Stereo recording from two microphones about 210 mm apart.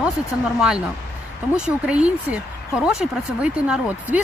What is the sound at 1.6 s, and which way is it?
Speech, 5° right (ahead or behind).